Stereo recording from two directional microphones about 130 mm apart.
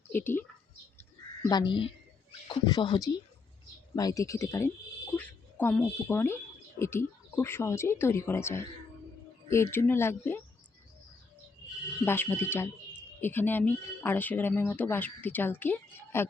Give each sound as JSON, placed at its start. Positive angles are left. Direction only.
{"t": 0.1, "sound": "speech", "side_deg": 15}
{"t": 1.5, "sound": "speech", "side_deg": 35}
{"t": 12.0, "sound": "speech", "side_deg": 15}